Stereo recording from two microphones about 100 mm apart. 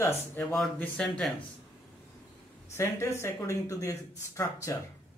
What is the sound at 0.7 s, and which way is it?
Speech, 10° left (ahead or behind).